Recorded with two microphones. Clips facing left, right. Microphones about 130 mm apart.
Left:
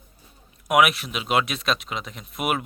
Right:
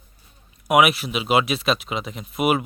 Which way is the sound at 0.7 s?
Centre (ahead or behind).